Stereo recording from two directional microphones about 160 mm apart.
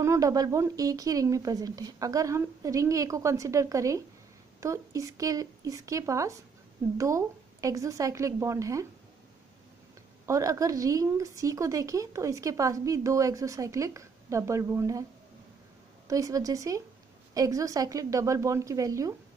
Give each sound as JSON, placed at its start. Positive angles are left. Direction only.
{"t": 0.0, "sound": "a woman's voice", "side_deg": -20}
{"t": 10.2, "sound": "a woman's voice", "side_deg": -20}
{"t": 16.1, "sound": "a woman's voice", "side_deg": -20}